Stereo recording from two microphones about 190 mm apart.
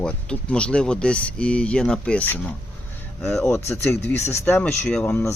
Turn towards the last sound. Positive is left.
turn(degrees=5)  # may be behind; listen again after turning